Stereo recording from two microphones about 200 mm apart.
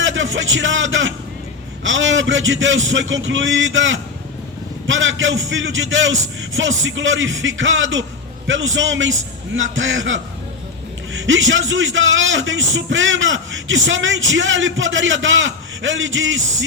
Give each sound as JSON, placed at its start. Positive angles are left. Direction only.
{"t": 0.0, "sound": "a man's voice", "side_deg": -70}